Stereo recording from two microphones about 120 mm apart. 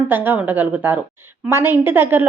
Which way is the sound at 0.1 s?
15° right (ahead or behind).